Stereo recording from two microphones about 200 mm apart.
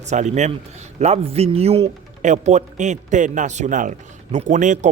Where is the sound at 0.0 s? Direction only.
35° right (ahead or behind).